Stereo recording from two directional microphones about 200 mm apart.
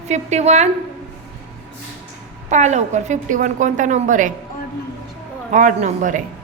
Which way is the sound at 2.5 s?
35° right (ahead or behind).